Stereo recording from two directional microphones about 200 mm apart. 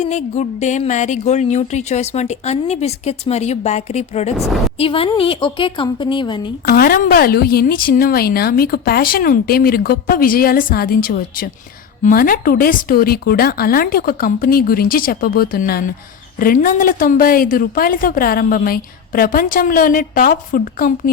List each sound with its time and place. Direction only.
0.0 s speech: 35° left (ahead or behind)
4.4 s a woman's voice: centre (ahead or behind)
4.8 s a woman's voice: 25° left (ahead or behind)
6.7 s a woman's voice: 50° left (ahead or behind)